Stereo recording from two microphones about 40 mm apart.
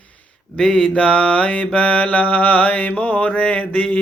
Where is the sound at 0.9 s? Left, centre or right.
Left.